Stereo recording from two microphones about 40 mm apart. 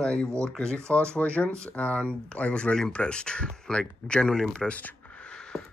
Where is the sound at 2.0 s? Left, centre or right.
Left.